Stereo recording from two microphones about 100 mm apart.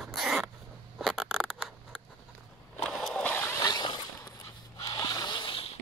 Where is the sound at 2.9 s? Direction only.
10° left (ahead or behind).